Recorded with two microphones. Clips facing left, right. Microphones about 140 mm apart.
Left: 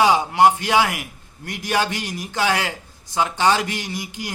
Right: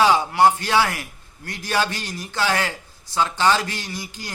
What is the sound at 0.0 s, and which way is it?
A man's voice, 15° left (ahead or behind).